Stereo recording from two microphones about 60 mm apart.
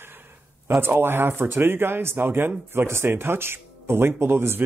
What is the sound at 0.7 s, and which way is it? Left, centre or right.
Speech, right.